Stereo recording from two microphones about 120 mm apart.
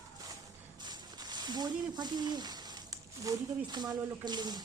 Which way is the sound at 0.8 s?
35° right (ahead or behind).